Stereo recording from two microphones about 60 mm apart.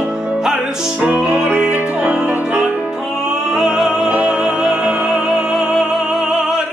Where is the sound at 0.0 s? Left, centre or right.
Centre.